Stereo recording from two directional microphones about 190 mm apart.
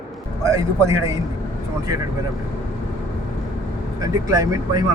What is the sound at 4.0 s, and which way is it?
Speech, 15° right (ahead or behind).